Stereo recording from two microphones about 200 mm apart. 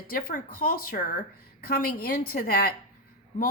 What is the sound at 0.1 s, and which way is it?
Speech, 45° left (ahead or behind).